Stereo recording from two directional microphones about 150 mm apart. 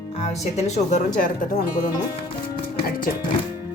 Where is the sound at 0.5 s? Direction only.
50° left (ahead or behind); by 1.9 s 65° left (ahead or behind).